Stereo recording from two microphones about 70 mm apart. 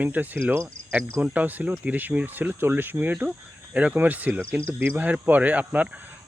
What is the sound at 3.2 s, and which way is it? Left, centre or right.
A man's voice, centre.